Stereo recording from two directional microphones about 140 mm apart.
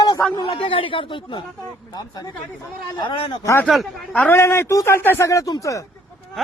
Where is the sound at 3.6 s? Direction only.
5° left (ahead or behind); by 5.8 s 25° left (ahead or behind).